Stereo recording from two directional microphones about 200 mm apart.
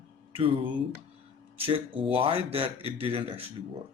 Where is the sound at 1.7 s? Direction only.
25° right (ahead or behind).